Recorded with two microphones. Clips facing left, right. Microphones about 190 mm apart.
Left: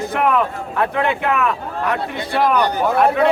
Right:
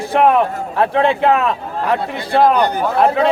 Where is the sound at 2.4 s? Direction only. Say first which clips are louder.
Right 4 dB; 50° right (ahead or behind).